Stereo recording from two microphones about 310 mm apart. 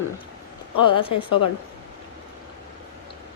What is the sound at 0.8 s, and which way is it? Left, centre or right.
Speech, centre.